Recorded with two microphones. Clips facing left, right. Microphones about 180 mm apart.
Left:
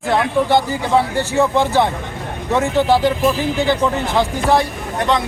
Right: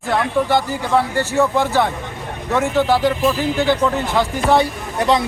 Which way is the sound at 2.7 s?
15° left (ahead or behind).